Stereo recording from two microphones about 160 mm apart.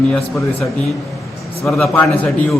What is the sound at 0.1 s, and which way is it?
A man's voice, centre (ahead or behind).